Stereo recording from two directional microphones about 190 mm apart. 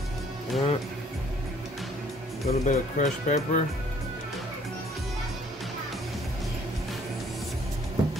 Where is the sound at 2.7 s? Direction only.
40° left (ahead or behind).